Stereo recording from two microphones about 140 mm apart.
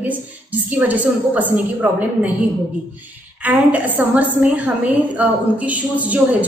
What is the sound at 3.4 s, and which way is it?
A woman's voice, 10° right (ahead or behind).